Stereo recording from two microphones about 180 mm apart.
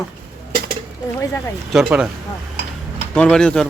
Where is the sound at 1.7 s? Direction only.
5° right (ahead or behind).